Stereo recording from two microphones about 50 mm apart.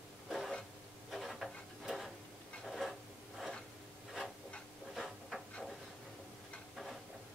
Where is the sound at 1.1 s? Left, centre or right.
Centre.